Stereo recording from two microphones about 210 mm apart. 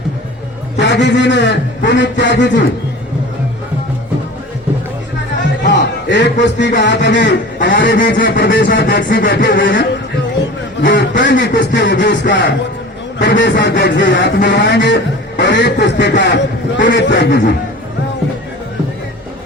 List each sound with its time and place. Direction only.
0.8 s a man's voice: 55° left (ahead or behind)
5.4 s music: 55° left (ahead or behind)
6.4 s a man's voice: 55° left (ahead or behind)
8.1 s a sound: 45° left (ahead or behind)
10.8 s a man's voice: 60° left (ahead or behind)